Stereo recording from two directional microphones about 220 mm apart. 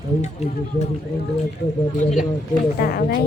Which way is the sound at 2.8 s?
45° left (ahead or behind).